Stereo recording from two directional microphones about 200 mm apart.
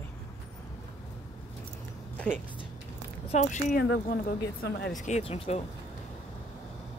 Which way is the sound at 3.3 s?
35° left (ahead or behind).